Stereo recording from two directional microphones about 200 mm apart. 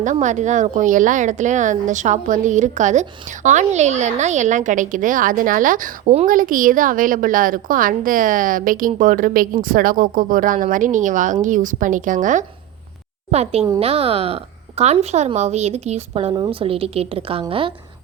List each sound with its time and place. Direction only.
0.0 s a woman's voice: 35° right (ahead or behind)